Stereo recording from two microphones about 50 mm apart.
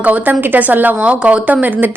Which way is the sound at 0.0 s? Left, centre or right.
Right.